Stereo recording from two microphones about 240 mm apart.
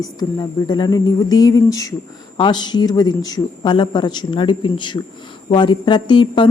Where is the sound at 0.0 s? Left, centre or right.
Centre.